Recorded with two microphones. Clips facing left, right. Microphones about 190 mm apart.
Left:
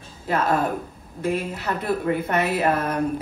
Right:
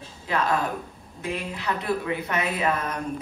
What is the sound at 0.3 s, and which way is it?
A woman's voice, 50° left (ahead or behind).